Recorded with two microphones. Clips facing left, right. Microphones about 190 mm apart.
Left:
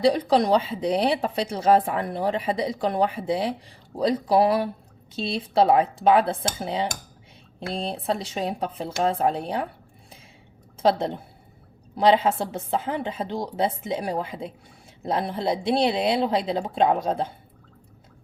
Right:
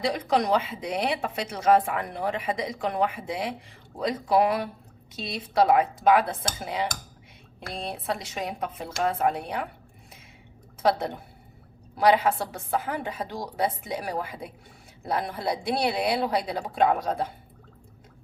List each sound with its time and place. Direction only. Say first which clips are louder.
0.0 s a woman's voice: left 5 dB; 35° left (ahead or behind)
10.8 s a woman's voice: left 3 dB; 30° left (ahead or behind)